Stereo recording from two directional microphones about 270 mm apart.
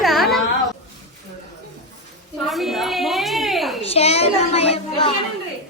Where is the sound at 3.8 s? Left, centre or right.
Left.